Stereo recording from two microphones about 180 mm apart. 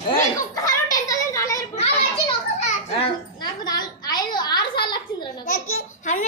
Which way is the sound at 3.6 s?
20° left (ahead or behind).